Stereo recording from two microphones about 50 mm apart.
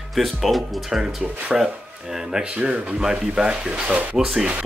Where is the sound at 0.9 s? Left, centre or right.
Centre.